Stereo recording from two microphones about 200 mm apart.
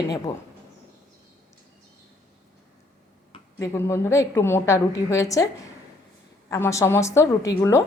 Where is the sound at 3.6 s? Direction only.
15° left (ahead or behind).